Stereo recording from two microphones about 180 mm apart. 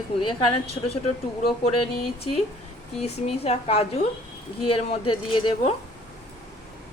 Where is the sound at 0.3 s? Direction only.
30° left (ahead or behind).